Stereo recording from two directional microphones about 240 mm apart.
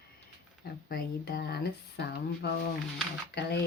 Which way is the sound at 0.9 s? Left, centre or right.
Left.